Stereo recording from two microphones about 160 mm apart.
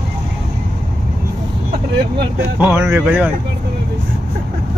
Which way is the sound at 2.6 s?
15° right (ahead or behind).